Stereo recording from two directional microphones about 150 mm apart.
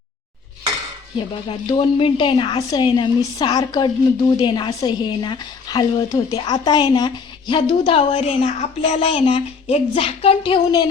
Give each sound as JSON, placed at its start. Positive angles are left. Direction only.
{"t": 1.5, "sound": "speech", "side_deg": 35}